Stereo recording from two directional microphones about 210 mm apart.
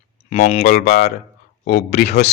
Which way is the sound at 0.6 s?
50° left (ahead or behind).